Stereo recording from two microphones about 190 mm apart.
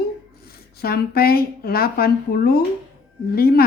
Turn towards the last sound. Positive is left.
turn(degrees=50)  # may be behind; listen again after turning